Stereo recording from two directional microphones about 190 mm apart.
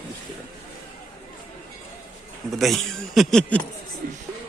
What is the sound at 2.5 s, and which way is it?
A man's voice, centre (ahead or behind).